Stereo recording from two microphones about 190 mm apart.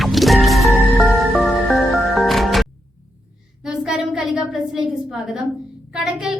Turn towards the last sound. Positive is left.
turn(degrees=-5)  # may be behind; listen again after turning